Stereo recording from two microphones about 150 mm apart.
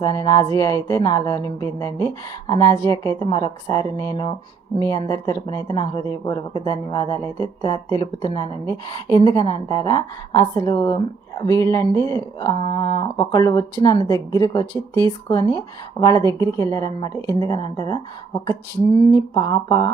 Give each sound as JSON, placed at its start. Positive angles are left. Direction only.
{"t": 0.0, "sound": "a woman's voice", "side_deg": 25}
{"t": 8.6, "sound": "a woman's voice", "side_deg": -30}
{"t": 9.2, "sound": "a woman's voice", "side_deg": 25}
{"t": 14.7, "sound": "speech", "side_deg": -25}
{"t": 15.3, "sound": "a woman's voice", "side_deg": 20}
{"t": 19.1, "sound": "a woman's voice", "side_deg": 25}